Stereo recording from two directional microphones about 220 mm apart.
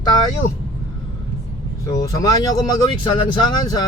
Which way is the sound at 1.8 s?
15° left (ahead or behind).